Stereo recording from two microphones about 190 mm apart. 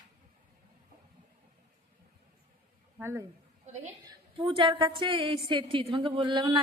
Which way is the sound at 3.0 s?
15° right (ahead or behind).